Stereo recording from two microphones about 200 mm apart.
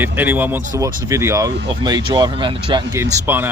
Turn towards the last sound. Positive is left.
turn(degrees=-10)  # may be behind; listen again after turning